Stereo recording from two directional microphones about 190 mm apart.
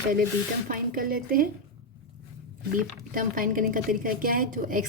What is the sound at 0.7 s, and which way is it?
Speech, 50° right (ahead or behind).